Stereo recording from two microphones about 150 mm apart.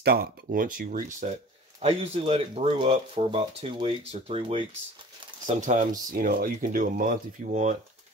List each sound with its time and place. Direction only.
0.0 s speech: 90° right; by 1.3 s 60° right (ahead or behind)
1.8 s speech: 40° right (ahead or behind)
5.6 s speech: 55° right (ahead or behind)